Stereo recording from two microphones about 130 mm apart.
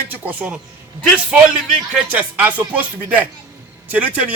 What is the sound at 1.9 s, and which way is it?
A man's voice, 10° right (ahead or behind).